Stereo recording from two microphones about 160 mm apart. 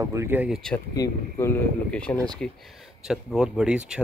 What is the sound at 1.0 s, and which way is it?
Speech, 15° left (ahead or behind).